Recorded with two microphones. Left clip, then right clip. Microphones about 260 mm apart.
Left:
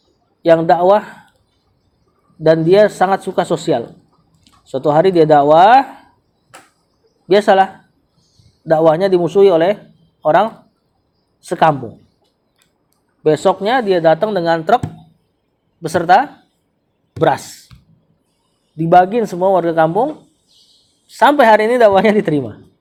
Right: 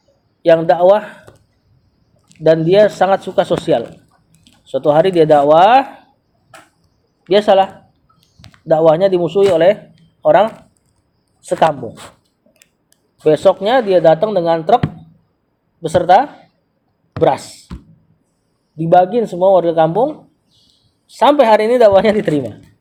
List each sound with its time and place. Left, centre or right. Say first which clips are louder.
0.4 s a man's voice: right 1 dB; left
2.4 s a man's voice: even; left
7.3 s a man's voice: even; left
13.2 s a man's voice: right 2 dB; left
15.8 s a man's voice: right 1 dB; left
18.8 s a man's voice: even; left
21.1 s a man's voice: even; left